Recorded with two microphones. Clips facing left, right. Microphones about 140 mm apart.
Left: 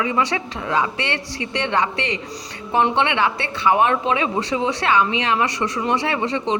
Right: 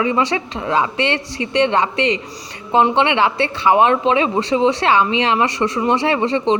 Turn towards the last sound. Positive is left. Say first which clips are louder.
# right 5 dB
turn(degrees=-30)  # may be behind; listen again after turning